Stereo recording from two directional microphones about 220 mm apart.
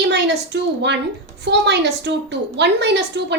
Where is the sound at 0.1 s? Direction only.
50° right (ahead or behind).